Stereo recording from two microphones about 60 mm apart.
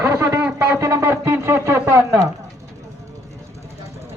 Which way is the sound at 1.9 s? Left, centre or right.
Right.